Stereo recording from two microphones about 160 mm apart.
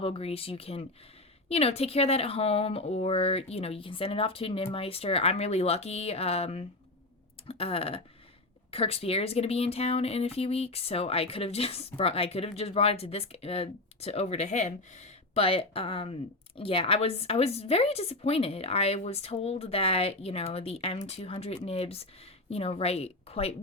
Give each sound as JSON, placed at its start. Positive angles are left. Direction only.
{"t": 0.0, "sound": "a woman's voice", "side_deg": 40}